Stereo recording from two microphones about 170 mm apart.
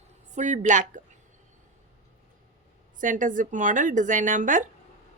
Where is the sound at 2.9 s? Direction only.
50° right (ahead or behind).